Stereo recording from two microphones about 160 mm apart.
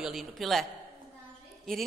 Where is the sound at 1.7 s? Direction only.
5° left (ahead or behind).